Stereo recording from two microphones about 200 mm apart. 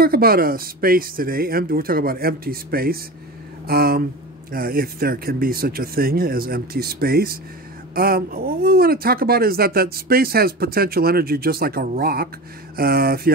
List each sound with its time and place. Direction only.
0.0 s speech: 50° right (ahead or behind)